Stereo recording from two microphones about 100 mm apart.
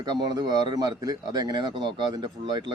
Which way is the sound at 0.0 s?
40° right (ahead or behind).